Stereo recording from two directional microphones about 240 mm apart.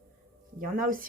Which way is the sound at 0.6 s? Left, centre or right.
Right.